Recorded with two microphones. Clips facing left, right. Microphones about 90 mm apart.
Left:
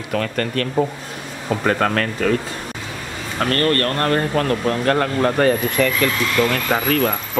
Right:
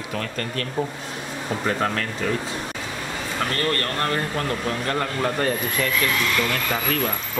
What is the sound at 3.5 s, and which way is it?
Speech, 55° left (ahead or behind).